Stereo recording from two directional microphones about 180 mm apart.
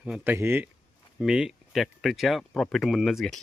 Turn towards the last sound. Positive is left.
turn(degrees=0)  # may be behind; listen again after turning